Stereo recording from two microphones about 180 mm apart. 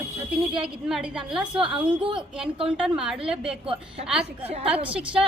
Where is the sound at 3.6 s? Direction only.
30° right (ahead or behind).